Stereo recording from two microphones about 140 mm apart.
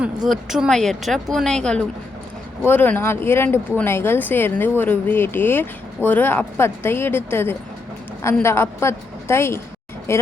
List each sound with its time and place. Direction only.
0.3 s speech: 5° right (ahead or behind); by 10.2 s 20° left (ahead or behind)